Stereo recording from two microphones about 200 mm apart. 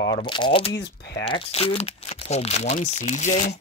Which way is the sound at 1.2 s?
25° left (ahead or behind).